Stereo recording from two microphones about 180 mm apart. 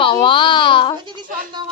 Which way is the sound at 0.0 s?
30° left (ahead or behind).